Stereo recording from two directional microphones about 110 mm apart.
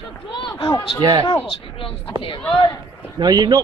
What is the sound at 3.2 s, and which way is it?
Speech, 40° right (ahead or behind).